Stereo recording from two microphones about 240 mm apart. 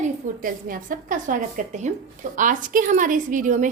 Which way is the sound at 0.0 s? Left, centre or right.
Right.